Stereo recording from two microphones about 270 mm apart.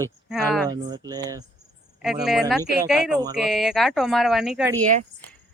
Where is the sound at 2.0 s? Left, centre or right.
Centre.